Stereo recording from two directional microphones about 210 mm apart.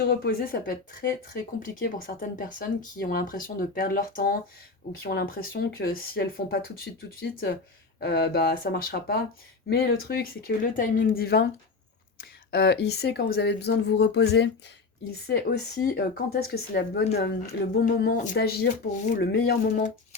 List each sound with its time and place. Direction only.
0.0 s speech: 50° left (ahead or behind)